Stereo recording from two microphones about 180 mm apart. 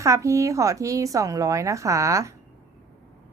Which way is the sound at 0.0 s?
15° right (ahead or behind).